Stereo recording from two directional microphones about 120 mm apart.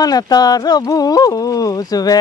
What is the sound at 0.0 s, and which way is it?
Speech, 30° left (ahead or behind).